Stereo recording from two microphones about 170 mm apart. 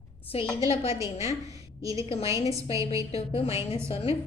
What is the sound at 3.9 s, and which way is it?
Speech, 35° left (ahead or behind).